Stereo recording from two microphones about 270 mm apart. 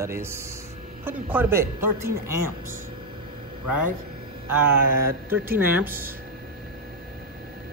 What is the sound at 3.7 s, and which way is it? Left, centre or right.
Speech, right.